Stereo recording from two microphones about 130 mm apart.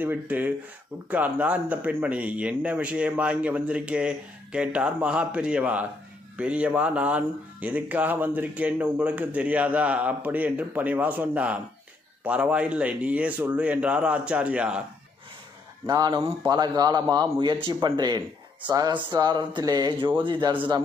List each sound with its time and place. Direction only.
0.0 s speech: 15° right (ahead or behind)
15.9 s a man's voice: 30° right (ahead or behind)